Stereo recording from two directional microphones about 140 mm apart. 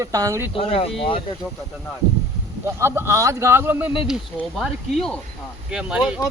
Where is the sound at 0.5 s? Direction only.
45° left (ahead or behind).